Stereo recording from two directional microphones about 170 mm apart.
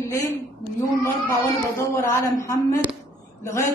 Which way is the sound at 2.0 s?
15° left (ahead or behind).